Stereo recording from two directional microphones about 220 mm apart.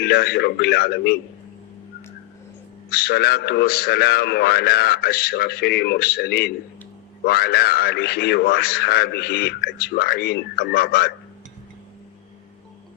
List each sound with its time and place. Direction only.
0.0 s a man's voice: 45° left (ahead or behind)
2.9 s a man's voice: 45° left (ahead or behind)